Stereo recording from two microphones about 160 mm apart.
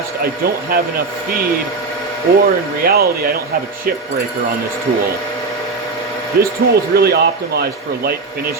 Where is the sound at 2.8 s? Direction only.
70° right (ahead or behind).